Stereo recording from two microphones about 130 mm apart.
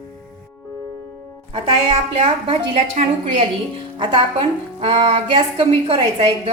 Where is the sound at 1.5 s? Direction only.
40° right (ahead or behind).